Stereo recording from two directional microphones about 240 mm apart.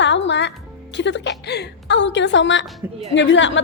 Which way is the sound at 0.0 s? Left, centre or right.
Left.